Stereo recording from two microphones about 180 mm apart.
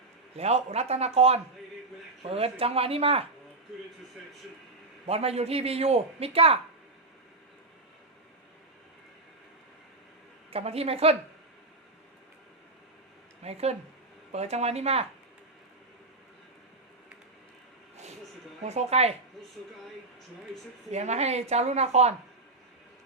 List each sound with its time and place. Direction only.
0.3 s a man's voice: 35° right (ahead or behind)
5.0 s a man's voice: 35° right (ahead or behind)
10.5 s a man's voice: 35° right (ahead or behind)
13.4 s a man's voice: 35° right (ahead or behind)
17.9 s a sound: 40° right (ahead or behind)
18.6 s a man's voice: 40° right (ahead or behind)
20.9 s a man's voice: 40° right (ahead or behind)